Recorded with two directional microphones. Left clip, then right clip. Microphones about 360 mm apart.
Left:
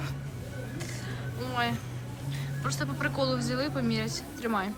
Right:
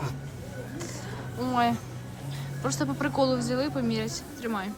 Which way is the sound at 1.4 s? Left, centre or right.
Centre.